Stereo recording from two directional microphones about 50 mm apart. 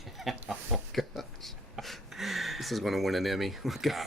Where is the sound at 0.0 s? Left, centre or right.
Centre.